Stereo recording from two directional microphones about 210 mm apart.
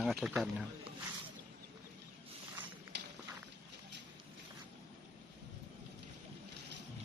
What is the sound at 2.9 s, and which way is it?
Walk, 55° right (ahead or behind).